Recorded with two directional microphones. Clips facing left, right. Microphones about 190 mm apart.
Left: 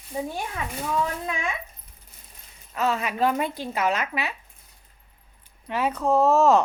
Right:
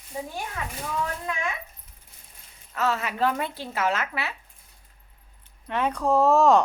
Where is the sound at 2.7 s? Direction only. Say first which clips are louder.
Left 1 dB; 15° left (ahead or behind).